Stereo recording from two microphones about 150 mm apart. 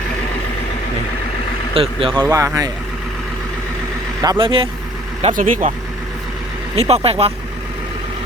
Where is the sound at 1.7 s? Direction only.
40° right (ahead or behind).